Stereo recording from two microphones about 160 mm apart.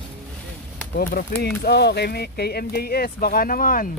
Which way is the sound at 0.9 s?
80° left.